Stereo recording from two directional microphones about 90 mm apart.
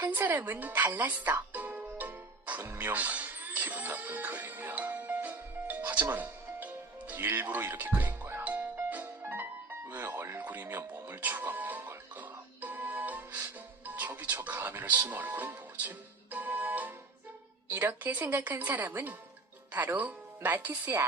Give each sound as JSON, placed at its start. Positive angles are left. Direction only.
{"t": 0.0, "sound": "a woman's voice", "side_deg": -20}
{"t": 1.5, "sound": "music", "side_deg": -20}
{"t": 14.2, "sound": "a woman's voice", "side_deg": -20}